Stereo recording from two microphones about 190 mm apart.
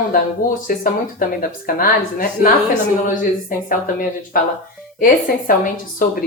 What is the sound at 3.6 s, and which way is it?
A woman's voice, 45° left (ahead or behind).